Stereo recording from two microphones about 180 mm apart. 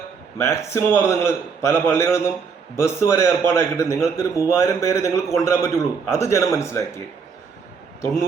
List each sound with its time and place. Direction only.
0.3 s a man's voice: 15° left (ahead or behind)